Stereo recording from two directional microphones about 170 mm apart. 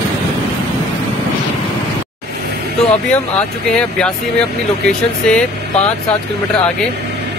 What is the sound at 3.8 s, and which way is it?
Speech, 5° left (ahead or behind).